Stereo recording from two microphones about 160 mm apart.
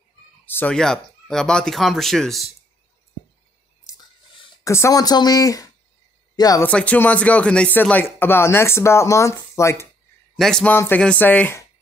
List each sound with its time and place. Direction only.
0.5 s speech: 10° left (ahead or behind)
4.6 s speech: 20° left (ahead or behind)
6.6 s speech: 10° left (ahead or behind)
10.3 s speech: 5° left (ahead or behind)